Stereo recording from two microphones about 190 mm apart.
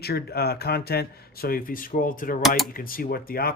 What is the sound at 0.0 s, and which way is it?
Speech, 55° left (ahead or behind).